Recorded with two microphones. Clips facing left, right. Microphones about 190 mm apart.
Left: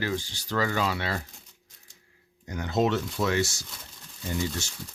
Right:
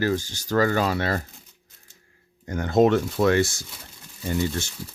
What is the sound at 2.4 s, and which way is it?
Speech, 50° right (ahead or behind).